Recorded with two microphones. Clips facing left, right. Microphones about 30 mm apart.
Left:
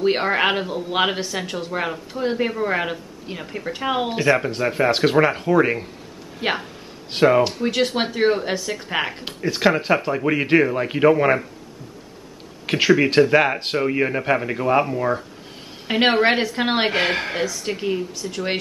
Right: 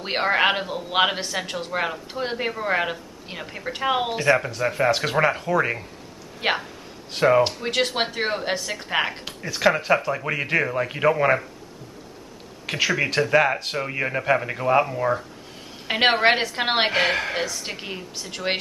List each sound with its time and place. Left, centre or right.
0.0 s speech: centre
4.1 s speech: centre
6.4 s a woman's voice: centre
7.1 s speech: left
7.6 s speech: centre
9.2 s speech: left; by 11.4 s centre
12.6 s speech: centre
13.6 s speech: left
13.8 s a woman's voice: centre